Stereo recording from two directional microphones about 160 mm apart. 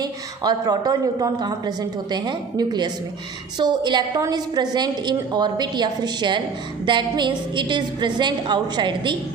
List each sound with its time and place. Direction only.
0.0 s a woman's voice: 25° right (ahead or behind)